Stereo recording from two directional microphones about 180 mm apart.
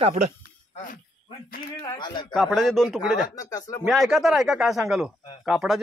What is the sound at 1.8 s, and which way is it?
Speech, 20° left (ahead or behind).